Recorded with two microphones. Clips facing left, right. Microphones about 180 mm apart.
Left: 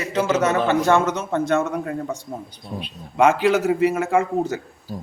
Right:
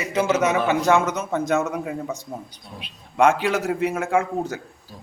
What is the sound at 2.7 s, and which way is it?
Speech, 55° left (ahead or behind).